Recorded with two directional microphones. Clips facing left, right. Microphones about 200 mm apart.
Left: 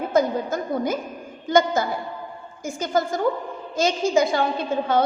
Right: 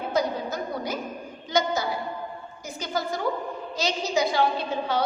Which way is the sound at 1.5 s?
50° left (ahead or behind).